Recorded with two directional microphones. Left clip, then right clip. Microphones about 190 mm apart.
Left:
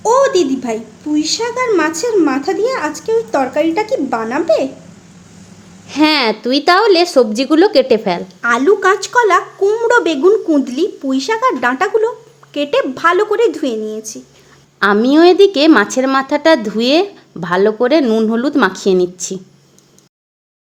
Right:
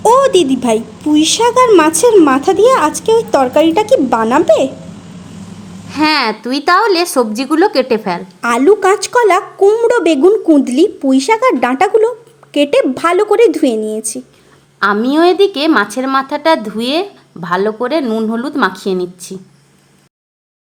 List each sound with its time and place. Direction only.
0.0 s a sound: 45° right (ahead or behind)
0.6 s a woman's voice: 45° right (ahead or behind)
5.9 s speech: 5° left (ahead or behind)
8.4 s speech: 30° right (ahead or behind)
14.8 s a woman's voice: 10° left (ahead or behind)